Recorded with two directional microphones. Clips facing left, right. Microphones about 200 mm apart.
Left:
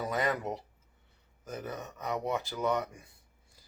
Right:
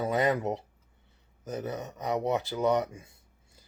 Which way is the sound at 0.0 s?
25° right (ahead or behind).